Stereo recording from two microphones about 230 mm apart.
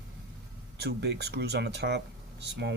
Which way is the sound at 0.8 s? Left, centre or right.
Right.